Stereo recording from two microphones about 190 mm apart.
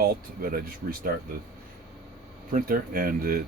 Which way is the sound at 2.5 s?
50° right (ahead or behind).